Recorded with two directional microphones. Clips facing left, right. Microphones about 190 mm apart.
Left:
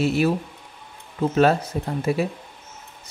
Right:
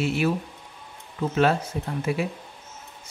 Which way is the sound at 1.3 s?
40° left (ahead or behind).